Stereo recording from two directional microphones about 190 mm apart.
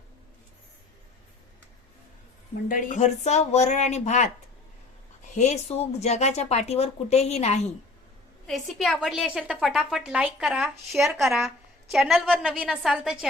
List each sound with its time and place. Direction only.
2.6 s speech: 45° left (ahead or behind)
5.3 s speech: 35° left (ahead or behind)
8.4 s a woman's voice: centre (ahead or behind)